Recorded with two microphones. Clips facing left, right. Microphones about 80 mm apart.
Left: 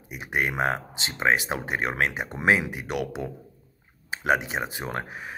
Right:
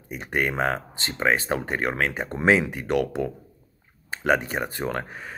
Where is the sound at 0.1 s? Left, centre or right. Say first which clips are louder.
Right 2 dB; centre.